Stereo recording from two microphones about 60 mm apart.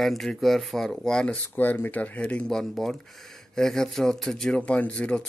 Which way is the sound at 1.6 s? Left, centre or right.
Left.